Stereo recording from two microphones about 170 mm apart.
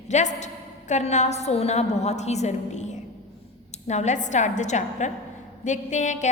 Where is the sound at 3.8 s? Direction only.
45° left (ahead or behind).